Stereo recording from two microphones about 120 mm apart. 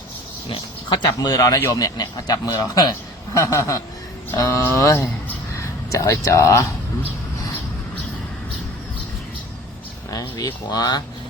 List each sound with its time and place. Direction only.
0.5 s speech: 40° left (ahead or behind); by 6.7 s 25° left (ahead or behind)
10.1 s speech: 30° left (ahead or behind)